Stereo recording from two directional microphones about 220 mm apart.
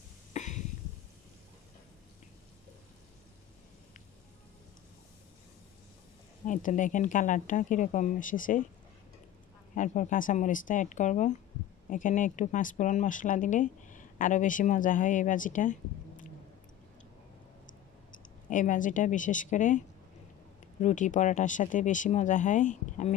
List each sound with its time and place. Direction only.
0.3 s a sound: 30° left (ahead or behind)
6.4 s speech: 35° left (ahead or behind)
9.8 s speech: 35° left (ahead or behind)
18.5 s speech: 35° left (ahead or behind)
20.8 s speech: 35° left (ahead or behind)